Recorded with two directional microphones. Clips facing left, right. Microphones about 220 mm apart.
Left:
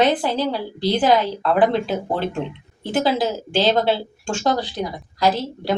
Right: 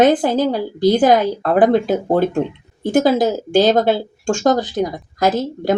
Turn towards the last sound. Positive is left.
turn(degrees=-45)  # may be behind; listen again after turning